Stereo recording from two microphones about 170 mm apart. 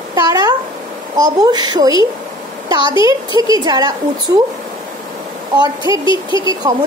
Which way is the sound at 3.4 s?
20° right (ahead or behind).